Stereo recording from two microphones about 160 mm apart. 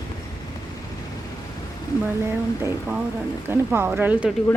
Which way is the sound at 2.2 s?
15° right (ahead or behind).